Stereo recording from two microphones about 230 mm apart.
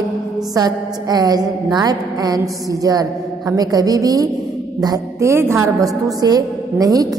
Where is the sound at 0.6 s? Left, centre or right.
Centre.